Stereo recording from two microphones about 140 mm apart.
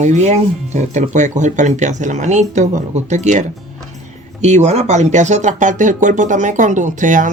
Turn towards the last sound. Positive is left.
turn(degrees=-65)  # may be behind; listen again after turning